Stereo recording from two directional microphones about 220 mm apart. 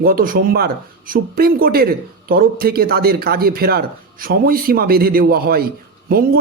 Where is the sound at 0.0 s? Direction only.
40° right (ahead or behind).